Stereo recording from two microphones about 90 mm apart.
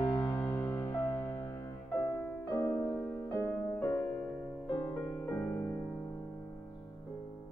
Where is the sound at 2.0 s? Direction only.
20° left (ahead or behind).